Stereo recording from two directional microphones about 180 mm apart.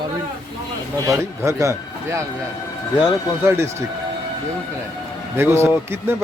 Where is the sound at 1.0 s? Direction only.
15° right (ahead or behind).